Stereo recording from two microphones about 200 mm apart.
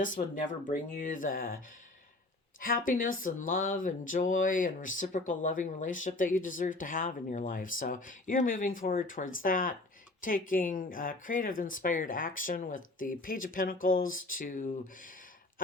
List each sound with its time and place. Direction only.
0.0 s speech: 40° left (ahead or behind)
2.6 s speech: 45° left (ahead or behind)